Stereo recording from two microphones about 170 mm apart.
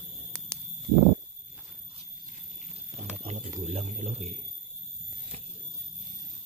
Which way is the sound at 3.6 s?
35° right (ahead or behind).